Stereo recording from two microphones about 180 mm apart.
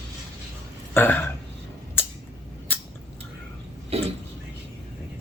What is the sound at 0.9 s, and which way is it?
Speech, 10° left (ahead or behind).